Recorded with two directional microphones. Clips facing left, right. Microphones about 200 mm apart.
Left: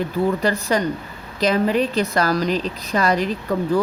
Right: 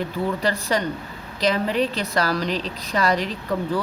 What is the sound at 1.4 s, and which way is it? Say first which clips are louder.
Speech: left 3 dB; 45° left (ahead or behind).